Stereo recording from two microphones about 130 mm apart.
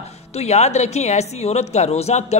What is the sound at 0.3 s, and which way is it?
A man's voice, 55° left (ahead or behind).